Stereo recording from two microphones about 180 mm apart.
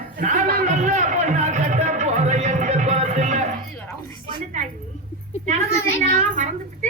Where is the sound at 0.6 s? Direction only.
40° right (ahead or behind).